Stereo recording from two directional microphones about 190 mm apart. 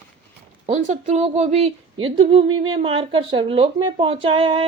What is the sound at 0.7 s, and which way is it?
A woman's voice, 35° right (ahead or behind).